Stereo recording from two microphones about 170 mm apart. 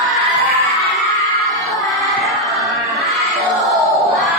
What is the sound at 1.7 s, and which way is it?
Music, centre (ahead or behind).